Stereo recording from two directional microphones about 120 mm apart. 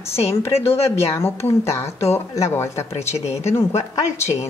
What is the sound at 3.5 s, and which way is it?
Speech, 25° left (ahead or behind).